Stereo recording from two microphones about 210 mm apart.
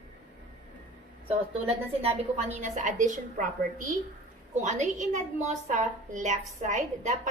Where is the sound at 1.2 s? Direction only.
30° right (ahead or behind).